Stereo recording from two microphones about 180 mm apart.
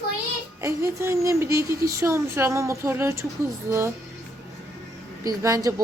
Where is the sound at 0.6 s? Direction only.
15° right (ahead or behind).